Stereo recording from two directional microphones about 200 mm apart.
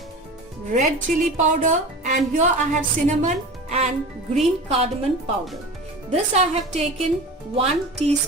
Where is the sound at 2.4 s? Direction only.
40° right (ahead or behind).